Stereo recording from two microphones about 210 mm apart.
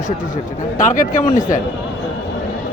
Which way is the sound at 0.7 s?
40° left (ahead or behind).